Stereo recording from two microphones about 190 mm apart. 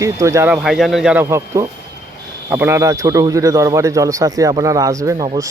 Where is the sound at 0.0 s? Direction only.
15° right (ahead or behind).